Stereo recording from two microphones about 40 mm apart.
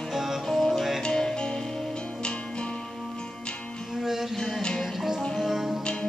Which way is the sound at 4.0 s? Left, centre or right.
Centre.